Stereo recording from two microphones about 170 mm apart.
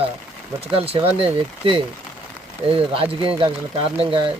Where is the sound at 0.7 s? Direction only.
35° right (ahead or behind).